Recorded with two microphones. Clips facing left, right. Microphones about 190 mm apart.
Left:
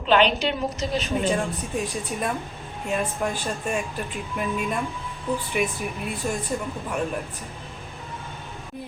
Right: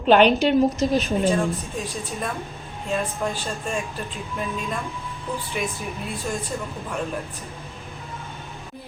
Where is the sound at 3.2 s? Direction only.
10° left (ahead or behind).